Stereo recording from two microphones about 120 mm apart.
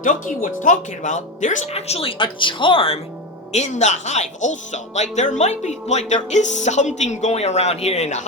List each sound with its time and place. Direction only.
0.0 s speech: 90° left; by 3.0 s 50° left (ahead or behind)
3.5 s speech: 70° left (ahead or behind)